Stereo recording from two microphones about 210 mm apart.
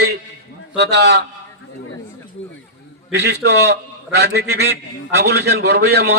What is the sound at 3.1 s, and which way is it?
A man's voice, 55° right (ahead or behind).